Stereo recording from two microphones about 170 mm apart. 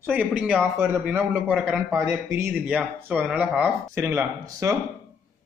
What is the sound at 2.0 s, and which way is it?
A man's voice, 15° right (ahead or behind).